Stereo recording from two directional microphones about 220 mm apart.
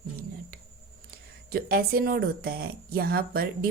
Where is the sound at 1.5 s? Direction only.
45° right (ahead or behind).